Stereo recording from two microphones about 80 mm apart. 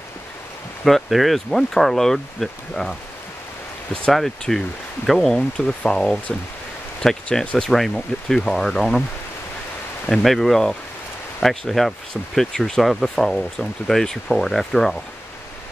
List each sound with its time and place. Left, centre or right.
0.8 s speech: centre
4.1 s speech: centre
10.0 s speech: centre